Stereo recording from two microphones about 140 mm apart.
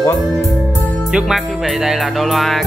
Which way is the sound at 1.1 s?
Centre (ahead or behind).